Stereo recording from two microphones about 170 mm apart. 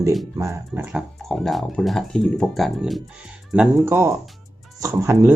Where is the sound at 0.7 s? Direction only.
10° right (ahead or behind).